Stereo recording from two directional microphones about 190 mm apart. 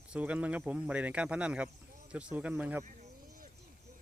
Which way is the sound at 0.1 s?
5° right (ahead or behind).